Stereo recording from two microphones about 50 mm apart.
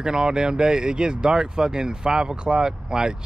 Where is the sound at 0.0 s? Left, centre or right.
Centre.